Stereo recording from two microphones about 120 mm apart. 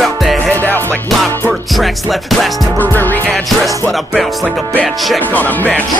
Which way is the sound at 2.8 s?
15° left (ahead or behind).